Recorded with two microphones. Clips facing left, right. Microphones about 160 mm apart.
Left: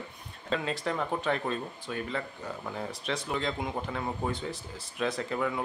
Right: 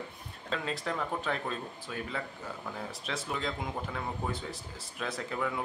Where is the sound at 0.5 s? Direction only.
Centre (ahead or behind).